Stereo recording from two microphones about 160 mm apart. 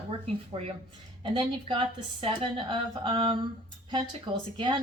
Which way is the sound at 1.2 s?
35° right (ahead or behind).